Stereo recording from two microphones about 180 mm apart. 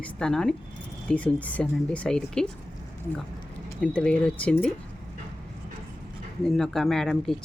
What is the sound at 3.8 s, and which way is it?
Speech, 5° left (ahead or behind).